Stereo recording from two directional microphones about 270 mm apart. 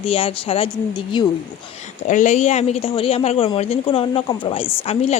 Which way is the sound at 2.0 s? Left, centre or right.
Left.